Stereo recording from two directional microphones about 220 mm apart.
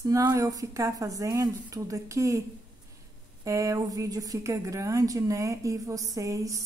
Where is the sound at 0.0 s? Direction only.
15° right (ahead or behind).